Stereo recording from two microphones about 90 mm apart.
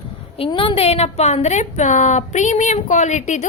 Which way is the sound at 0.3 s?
75° left (ahead or behind).